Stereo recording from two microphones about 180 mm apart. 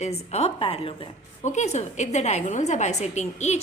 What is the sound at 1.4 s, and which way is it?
A woman's voice, 40° left (ahead or behind).